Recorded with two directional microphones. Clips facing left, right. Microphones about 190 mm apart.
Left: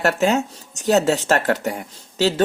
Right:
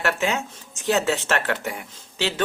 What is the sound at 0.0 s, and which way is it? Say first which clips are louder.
Speech: left 6 dB; 40° left (ahead or behind).